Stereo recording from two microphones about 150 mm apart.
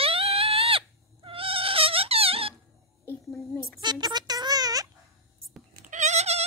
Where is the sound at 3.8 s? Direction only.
30° right (ahead or behind).